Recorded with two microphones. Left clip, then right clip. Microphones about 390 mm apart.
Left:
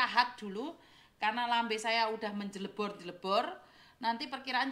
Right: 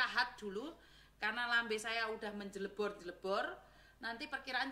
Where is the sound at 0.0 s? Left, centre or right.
Centre.